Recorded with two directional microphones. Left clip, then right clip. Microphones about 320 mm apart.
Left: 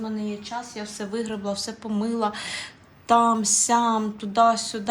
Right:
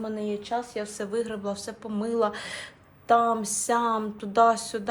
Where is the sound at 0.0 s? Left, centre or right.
Centre.